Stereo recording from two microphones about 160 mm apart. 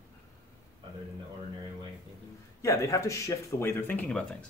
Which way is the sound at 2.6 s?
20° left (ahead or behind).